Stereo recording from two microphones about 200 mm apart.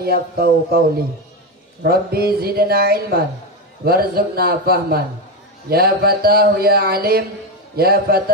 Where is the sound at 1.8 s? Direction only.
50° right (ahead or behind).